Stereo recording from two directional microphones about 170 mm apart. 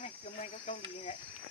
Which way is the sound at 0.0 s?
40° left (ahead or behind).